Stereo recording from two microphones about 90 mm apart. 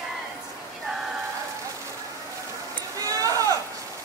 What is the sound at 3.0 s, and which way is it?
Sheep, 40° right (ahead or behind).